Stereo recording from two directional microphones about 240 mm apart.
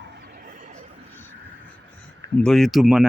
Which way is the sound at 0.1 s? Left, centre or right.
Right.